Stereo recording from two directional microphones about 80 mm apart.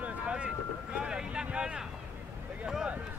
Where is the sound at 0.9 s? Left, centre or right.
Centre.